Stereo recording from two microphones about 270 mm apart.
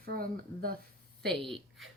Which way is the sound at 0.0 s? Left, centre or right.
Right.